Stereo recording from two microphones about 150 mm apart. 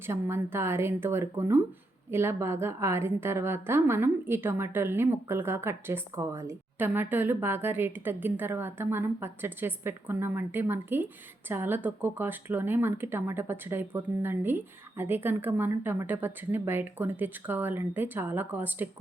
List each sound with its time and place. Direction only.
0.0 s a woman's voice: 15° right (ahead or behind)